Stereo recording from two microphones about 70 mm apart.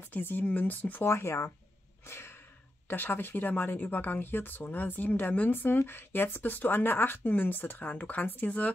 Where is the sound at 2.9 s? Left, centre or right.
Left.